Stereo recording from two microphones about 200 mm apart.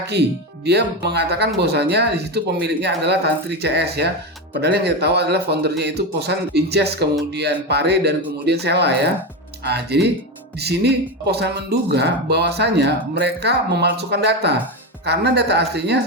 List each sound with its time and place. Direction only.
0.0 s speech: 55° right (ahead or behind)